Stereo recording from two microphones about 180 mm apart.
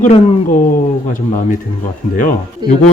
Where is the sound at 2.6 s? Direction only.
25° right (ahead or behind).